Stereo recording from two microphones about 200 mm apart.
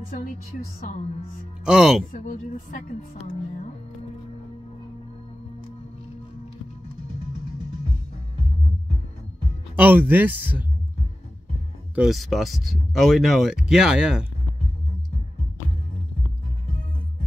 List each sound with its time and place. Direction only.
1.6 s speech: 5° right (ahead or behind)
2.1 s a woman's voice: 40° left (ahead or behind)
9.8 s speech: 10° right (ahead or behind)
11.9 s speech: centre (ahead or behind)